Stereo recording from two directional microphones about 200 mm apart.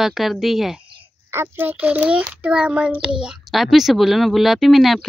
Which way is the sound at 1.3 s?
10° right (ahead or behind).